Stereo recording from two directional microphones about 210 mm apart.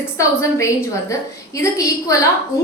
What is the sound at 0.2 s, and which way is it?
A woman's voice, 15° left (ahead or behind).